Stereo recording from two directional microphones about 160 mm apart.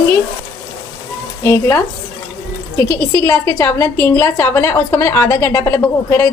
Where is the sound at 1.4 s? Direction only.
15° left (ahead or behind).